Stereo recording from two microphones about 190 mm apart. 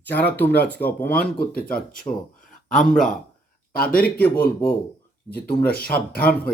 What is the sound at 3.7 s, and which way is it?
Speech, 50° left (ahead or behind).